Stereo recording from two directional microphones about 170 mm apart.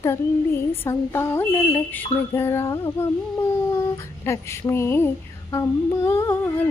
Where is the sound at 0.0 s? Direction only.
15° left (ahead or behind).